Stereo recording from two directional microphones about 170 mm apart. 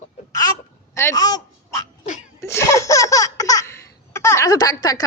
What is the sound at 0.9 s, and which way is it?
Speech, 20° left (ahead or behind).